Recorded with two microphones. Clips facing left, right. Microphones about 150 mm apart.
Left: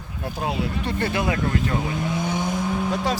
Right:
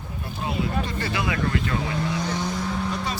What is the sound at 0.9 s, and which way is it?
Speech, 55° left (ahead or behind).